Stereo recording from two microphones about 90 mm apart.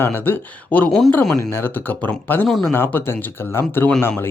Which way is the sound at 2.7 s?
25° left (ahead or behind).